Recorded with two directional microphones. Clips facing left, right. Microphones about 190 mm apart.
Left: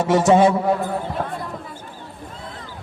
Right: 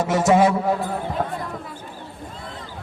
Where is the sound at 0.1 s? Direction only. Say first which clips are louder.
Left 3 dB; 30° left (ahead or behind).